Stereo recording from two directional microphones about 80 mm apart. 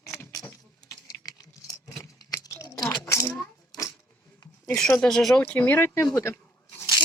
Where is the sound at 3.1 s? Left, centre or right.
Left.